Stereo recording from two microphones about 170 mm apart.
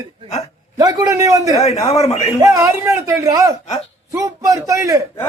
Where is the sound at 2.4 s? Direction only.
15° right (ahead or behind).